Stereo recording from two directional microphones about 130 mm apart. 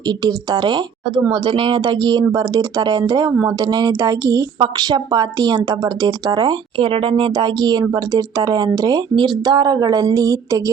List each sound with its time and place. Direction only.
0.3 s a woman's voice: 35° right (ahead or behind)